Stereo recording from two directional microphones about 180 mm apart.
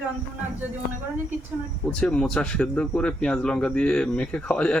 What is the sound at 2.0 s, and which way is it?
Speech, 5° left (ahead or behind).